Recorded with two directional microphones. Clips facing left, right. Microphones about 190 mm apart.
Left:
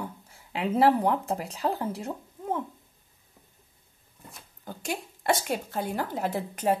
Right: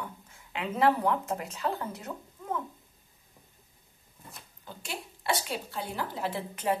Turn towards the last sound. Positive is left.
turn(degrees=40)  # may be behind; listen again after turning